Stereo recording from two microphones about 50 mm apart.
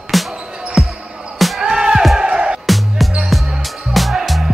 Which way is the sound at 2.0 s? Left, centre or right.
Centre.